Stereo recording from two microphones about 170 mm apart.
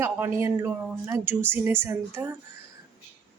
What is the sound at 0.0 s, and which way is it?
A woman's voice, 15° right (ahead or behind).